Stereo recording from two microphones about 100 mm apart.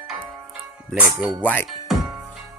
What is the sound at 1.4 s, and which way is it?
Music, 15° left (ahead or behind).